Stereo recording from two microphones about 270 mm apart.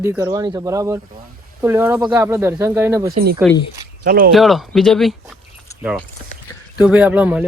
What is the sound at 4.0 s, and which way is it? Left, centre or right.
Speech, right.